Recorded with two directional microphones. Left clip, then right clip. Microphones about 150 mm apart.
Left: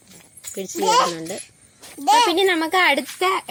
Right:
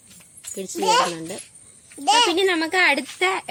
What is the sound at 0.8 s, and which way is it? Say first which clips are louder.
Speech: left 1 dB; 35° left (ahead or behind).